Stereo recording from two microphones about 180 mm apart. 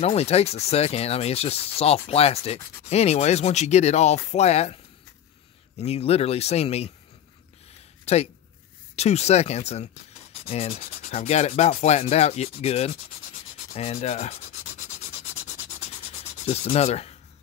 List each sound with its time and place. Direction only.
0.0 s speech: 35° left (ahead or behind)
5.8 s speech: 35° left (ahead or behind)
8.0 s speech: 35° left (ahead or behind)
16.4 s speech: 35° left (ahead or behind)